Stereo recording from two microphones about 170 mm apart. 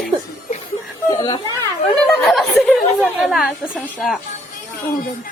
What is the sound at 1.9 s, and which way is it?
Chatter, centre (ahead or behind).